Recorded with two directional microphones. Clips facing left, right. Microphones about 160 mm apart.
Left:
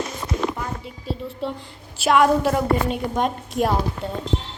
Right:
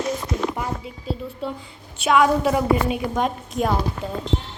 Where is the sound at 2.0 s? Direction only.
Centre (ahead or behind).